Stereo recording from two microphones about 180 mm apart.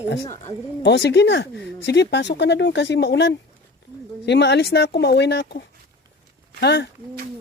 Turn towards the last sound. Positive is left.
turn(degrees=70)  # may be behind; listen again after turning